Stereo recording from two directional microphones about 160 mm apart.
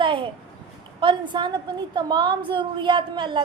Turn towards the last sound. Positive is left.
turn(degrees=-30)  # may be behind; listen again after turning